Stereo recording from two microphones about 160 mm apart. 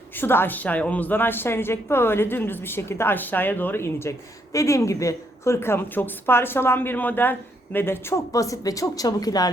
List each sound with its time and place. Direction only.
0.2 s a woman's voice: 15° left (ahead or behind)